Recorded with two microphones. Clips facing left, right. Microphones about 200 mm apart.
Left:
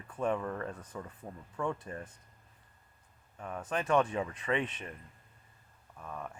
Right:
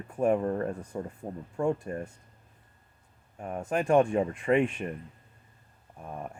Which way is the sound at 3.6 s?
45° right (ahead or behind).